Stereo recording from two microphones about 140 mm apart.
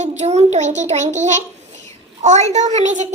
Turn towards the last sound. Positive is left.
turn(degrees=-60)  # may be behind; listen again after turning